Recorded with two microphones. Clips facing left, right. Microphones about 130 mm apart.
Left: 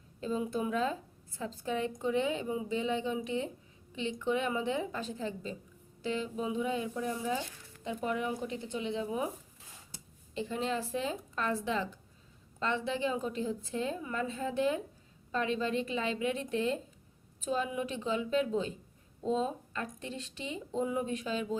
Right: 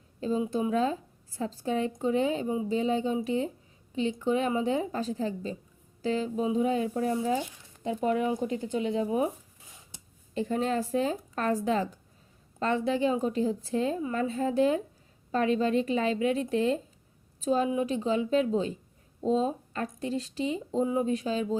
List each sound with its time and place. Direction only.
0.2 s speech: 30° right (ahead or behind)
9.0 s speech: 30° right (ahead or behind)
10.3 s speech: 40° right (ahead or behind)